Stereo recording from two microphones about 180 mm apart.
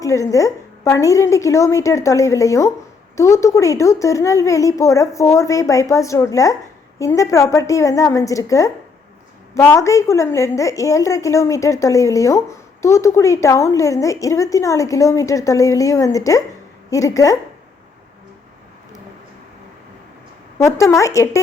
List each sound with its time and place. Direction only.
0.0 s a woman's voice: 20° left (ahead or behind)
20.7 s a woman's voice: 15° left (ahead or behind)